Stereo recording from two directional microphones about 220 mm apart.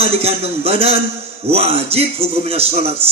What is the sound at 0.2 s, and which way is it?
A man's voice, 25° right (ahead or behind).